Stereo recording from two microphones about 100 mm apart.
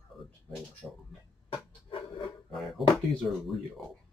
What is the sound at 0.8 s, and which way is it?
Speech, 10° left (ahead or behind).